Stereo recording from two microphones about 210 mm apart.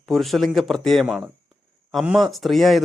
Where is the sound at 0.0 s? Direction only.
Centre (ahead or behind).